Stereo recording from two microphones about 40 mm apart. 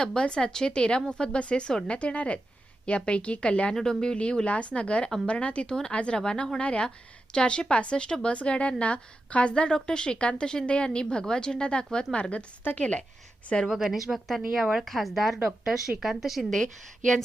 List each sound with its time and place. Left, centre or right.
0.0 s a woman's voice: centre
3.8 s a woman's voice: centre
13.7 s speech: centre
16.4 s a woman's voice: centre